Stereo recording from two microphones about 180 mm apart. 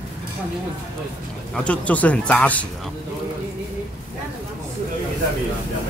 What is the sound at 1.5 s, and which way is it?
Speech, 5° left (ahead or behind).